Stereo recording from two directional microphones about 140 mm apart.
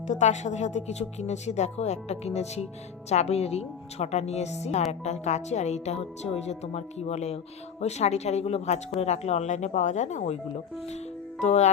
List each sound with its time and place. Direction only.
0.1 s speech: 55° left (ahead or behind)
11.3 s speech: 55° left (ahead or behind)